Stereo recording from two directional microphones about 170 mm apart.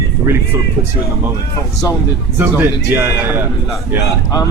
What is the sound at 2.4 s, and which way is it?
A man's voice, 10° right (ahead or behind).